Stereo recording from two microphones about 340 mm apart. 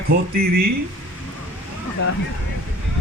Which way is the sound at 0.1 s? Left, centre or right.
Right.